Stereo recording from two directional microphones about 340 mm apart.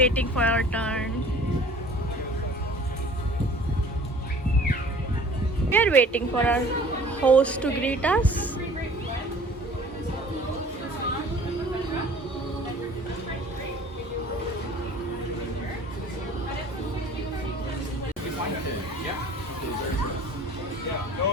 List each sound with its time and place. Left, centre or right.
0.0 s a woman's voice: centre
5.7 s a woman's voice: centre